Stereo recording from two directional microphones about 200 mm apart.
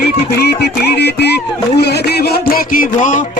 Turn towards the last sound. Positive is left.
turn(degrees=40)  # may be behind; listen again after turning